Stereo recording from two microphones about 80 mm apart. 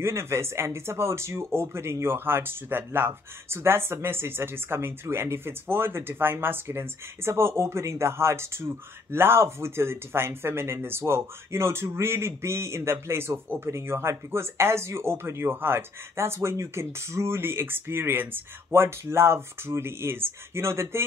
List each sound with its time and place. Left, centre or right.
0.0 s speech: right